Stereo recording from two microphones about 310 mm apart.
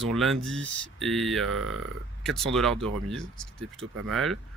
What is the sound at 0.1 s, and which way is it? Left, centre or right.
Speech, centre.